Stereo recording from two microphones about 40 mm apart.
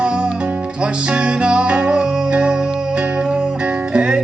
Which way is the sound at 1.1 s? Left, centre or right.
Right.